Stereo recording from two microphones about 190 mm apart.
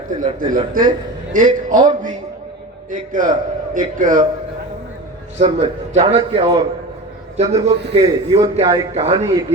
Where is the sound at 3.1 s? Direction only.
45° right (ahead or behind).